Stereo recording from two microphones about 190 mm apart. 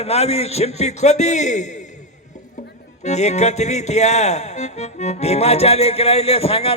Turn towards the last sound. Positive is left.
turn(degrees=30)  # may be behind; listen again after turning